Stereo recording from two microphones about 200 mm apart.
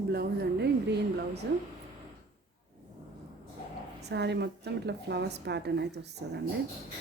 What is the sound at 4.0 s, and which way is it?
Speech, 60° right (ahead or behind).